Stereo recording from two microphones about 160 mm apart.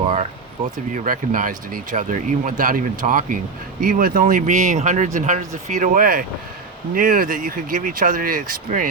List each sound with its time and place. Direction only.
0.9 s speech: 60° right (ahead or behind)